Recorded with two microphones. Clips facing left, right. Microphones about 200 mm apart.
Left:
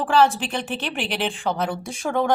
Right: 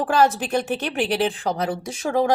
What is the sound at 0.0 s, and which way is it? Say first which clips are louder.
Speech: even; 40° right (ahead or behind).